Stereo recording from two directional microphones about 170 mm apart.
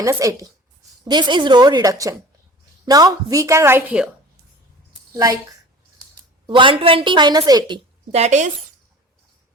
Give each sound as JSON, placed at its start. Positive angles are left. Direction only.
{"t": 0.0, "sound": "a woman's voice", "side_deg": -20}
{"t": 5.1, "sound": "a woman's voice", "side_deg": -20}
{"t": 8.1, "sound": "a woman's voice", "side_deg": -40}